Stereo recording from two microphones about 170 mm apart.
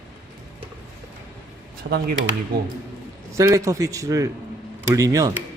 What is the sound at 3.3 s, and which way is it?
Speech, 20° right (ahead or behind).